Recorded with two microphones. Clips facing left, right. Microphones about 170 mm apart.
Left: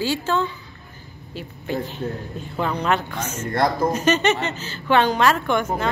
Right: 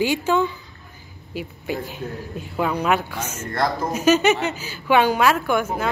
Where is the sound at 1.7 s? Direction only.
10° right (ahead or behind).